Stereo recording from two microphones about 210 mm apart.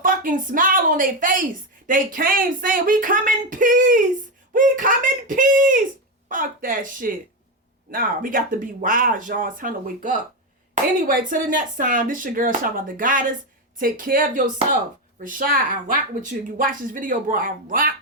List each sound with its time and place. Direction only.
0.0 s speech: 40° right (ahead or behind)